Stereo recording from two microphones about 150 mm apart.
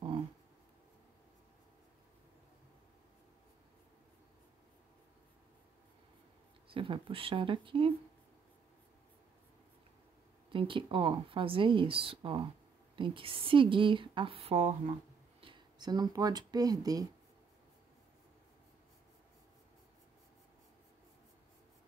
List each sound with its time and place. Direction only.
6.7 s speech: 35° right (ahead or behind)
10.5 s speech: 35° right (ahead or behind)
15.4 s speech: 30° right (ahead or behind)